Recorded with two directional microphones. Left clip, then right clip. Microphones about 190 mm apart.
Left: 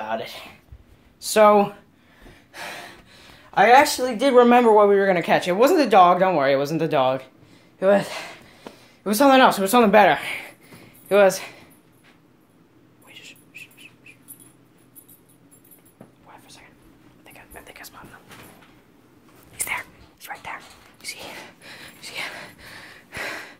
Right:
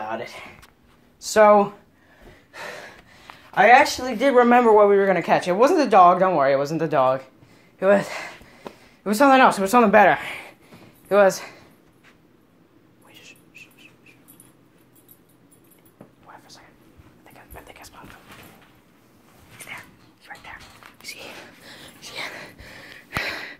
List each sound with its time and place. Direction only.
1.2 s speech: 5° left (ahead or behind)
3.5 s speech: 10° left (ahead or behind)
7.8 s gasp: centre (ahead or behind)
9.0 s speech: 5° left (ahead or behind)
13.1 s bird: 10° left (ahead or behind)
16.3 s whispering: 5° left (ahead or behind)
17.2 s whispering: 15° left (ahead or behind)
19.6 s dog: 35° left (ahead or behind)
21.0 s a sound: 10° left (ahead or behind)